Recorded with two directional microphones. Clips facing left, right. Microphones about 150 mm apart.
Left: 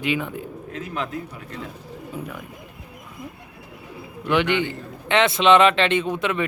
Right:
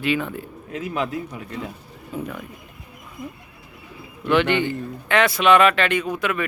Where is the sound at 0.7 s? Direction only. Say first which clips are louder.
Right 4 dB; 10° right (ahead or behind).